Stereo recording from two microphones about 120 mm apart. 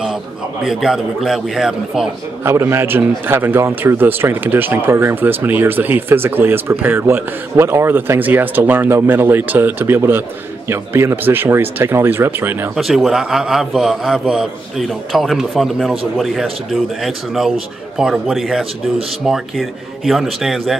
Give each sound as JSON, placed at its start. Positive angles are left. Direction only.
{"t": 0.7, "sound": "a man's voice", "side_deg": 0}
{"t": 2.4, "sound": "a man's voice", "side_deg": -20}
{"t": 12.7, "sound": "a man's voice", "side_deg": 0}